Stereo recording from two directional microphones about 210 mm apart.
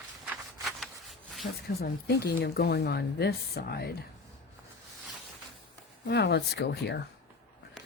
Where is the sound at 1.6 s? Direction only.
45° left (ahead or behind).